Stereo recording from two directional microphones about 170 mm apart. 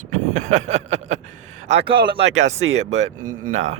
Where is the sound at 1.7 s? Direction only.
80° right.